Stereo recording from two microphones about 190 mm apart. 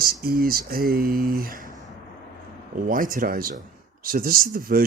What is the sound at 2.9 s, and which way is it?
Speech, 45° right (ahead or behind).